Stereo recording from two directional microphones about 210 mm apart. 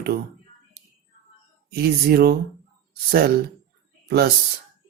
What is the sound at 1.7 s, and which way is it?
Speech, 50° right (ahead or behind).